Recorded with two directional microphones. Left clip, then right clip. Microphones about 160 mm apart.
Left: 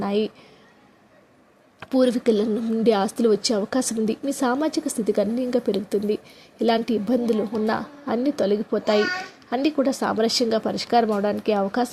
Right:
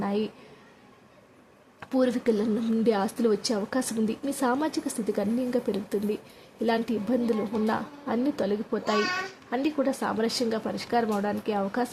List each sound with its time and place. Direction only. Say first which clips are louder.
0.0 s speech: left 6 dB; 20° left (ahead or behind)
1.8 s a woman's voice: left 5 dB; 20° left (ahead or behind)